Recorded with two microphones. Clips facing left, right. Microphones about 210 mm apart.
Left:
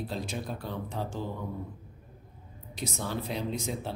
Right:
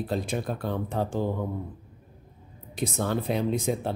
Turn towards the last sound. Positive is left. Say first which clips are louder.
# right 7 dB
turn(degrees=-55)  # may be behind; listen again after turning